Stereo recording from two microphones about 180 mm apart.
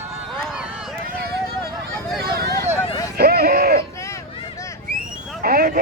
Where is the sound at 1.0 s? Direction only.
55° right (ahead or behind).